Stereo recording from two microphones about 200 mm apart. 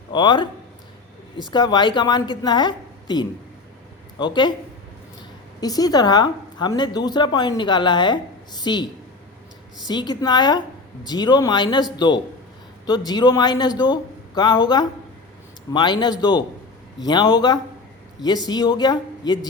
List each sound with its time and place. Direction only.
0.1 s a woman's voice: 25° left (ahead or behind)
5.5 s a woman's voice: 20° left (ahead or behind)